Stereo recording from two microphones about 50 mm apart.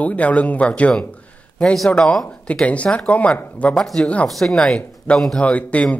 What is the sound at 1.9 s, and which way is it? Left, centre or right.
Speech, centre.